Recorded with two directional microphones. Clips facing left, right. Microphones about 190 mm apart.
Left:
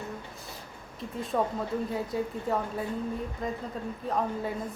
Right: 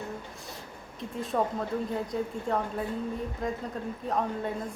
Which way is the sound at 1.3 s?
Centre (ahead or behind).